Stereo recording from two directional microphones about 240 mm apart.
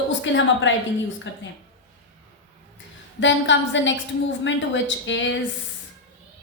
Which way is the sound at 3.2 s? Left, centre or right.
Left.